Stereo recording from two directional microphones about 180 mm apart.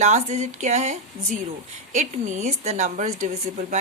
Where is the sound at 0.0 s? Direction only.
40° right (ahead or behind).